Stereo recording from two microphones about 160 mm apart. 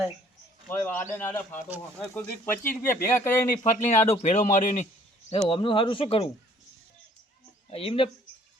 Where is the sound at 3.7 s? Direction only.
45° left (ahead or behind).